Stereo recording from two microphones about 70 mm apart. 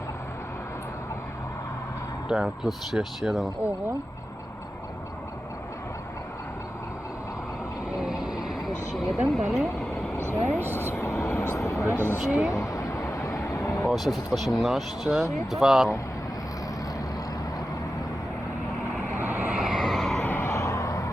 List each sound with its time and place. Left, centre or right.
2.3 s speech: centre
7.9 s vehicle: centre
9.5 s speech: centre
10.2 s vehicle: right
10.9 s vehicle: left
11.9 s speech: right
12.3 s speech: centre
12.5 s vehicle: left
13.9 s speech: centre
19.2 s vehicle: right
19.5 s vehicle: centre
20.2 s vehicle: left